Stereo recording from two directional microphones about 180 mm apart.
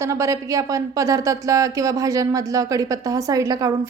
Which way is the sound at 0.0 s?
15° right (ahead or behind).